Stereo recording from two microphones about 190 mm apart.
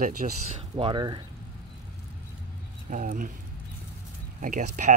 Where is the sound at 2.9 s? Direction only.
40° right (ahead or behind).